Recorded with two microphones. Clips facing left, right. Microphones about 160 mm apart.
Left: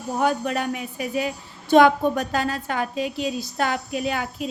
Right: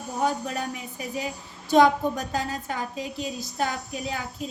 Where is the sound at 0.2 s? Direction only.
70° left (ahead or behind).